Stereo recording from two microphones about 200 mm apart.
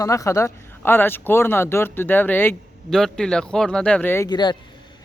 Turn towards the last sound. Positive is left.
turn(degrees=20)  # may be behind; listen again after turning